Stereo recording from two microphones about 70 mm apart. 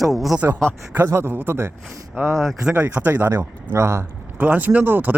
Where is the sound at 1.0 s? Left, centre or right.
Right.